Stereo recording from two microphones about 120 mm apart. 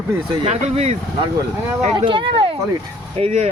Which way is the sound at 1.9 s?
45° right (ahead or behind).